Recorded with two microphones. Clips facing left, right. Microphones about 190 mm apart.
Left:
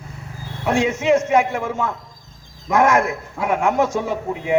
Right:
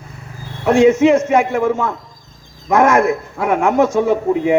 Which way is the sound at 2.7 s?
50° right (ahead or behind).